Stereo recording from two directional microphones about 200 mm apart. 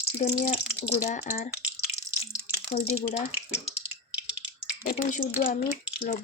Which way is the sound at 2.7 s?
35° left (ahead or behind).